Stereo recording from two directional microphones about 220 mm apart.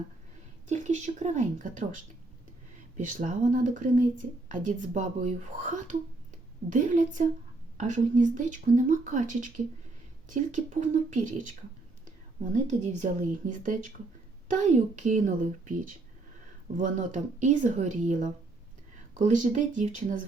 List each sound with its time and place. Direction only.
0.7 s speech: 35° right (ahead or behind)
3.0 s speech: 35° right (ahead or behind)
12.6 s speech: 35° right (ahead or behind)